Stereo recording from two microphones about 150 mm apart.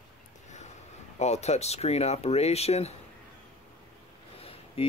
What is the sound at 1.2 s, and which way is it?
Speech, 50° left (ahead or behind).